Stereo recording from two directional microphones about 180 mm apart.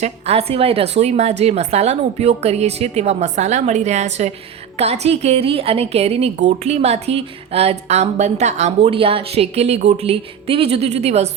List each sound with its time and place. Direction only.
0.0 s a woman's voice: 35° right (ahead or behind)